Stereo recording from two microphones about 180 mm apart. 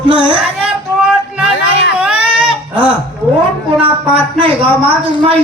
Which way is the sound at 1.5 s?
75° left (ahead or behind).